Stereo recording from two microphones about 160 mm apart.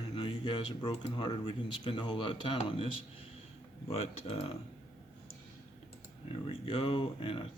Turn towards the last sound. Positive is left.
turn(degrees=35)  # may be behind; listen again after turning